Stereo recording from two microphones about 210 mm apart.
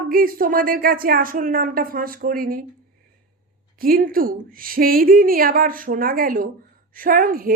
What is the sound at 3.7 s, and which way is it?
A woman's voice, 45° right (ahead or behind).